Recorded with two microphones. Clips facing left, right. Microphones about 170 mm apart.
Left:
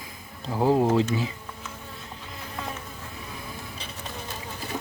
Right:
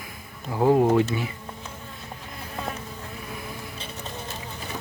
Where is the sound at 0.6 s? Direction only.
15° right (ahead or behind).